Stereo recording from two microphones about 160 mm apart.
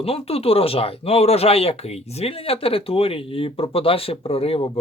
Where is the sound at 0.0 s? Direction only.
40° left (ahead or behind).